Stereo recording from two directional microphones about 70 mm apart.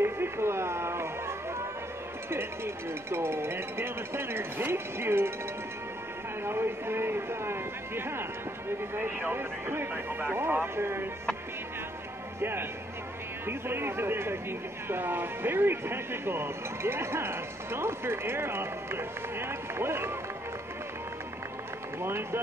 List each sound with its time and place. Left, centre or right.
0.0 s a sound: right
2.2 s speech: right
6.4 s speech: right
12.4 s speech: right
22.0 s speech: right